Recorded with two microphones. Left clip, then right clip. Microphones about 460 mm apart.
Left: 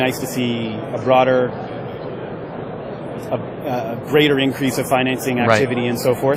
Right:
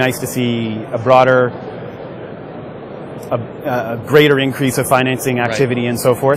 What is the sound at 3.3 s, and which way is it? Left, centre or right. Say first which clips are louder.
A man's voice: right 4 dB; right.